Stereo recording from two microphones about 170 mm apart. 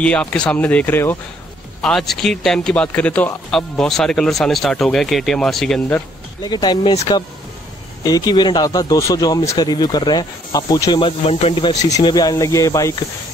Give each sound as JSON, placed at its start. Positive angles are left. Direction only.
{"t": 0.0, "sound": "speech", "side_deg": 5}
{"t": 6.4, "sound": "speech", "side_deg": 25}
{"t": 8.0, "sound": "speech", "side_deg": 20}
{"t": 11.9, "sound": "speech", "side_deg": 25}